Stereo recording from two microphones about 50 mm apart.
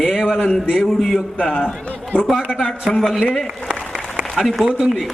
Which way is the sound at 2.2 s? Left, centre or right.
Centre.